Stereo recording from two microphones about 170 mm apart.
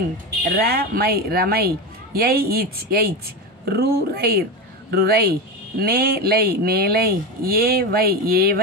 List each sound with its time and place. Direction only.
0.4 s speech: 65° right (ahead or behind)